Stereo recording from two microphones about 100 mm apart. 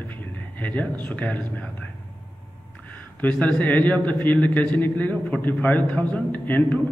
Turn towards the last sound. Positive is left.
turn(degrees=15)  # may be behind; listen again after turning